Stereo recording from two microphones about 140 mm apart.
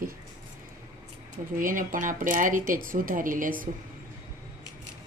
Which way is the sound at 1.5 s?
75° right (ahead or behind).